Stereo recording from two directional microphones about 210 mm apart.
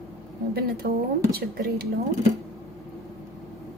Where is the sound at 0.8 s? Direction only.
40° right (ahead or behind).